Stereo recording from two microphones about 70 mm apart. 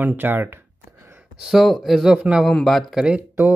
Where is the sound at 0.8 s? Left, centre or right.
Right.